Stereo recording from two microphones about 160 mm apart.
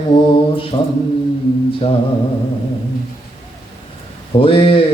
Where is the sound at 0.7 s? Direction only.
35° left (ahead or behind).